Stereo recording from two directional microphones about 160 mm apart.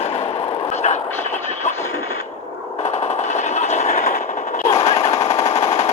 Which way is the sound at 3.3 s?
45° left (ahead or behind).